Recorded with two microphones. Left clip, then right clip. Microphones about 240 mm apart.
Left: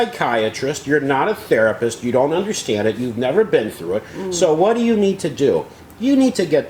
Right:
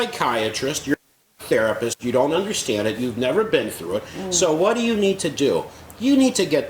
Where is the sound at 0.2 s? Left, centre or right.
Left.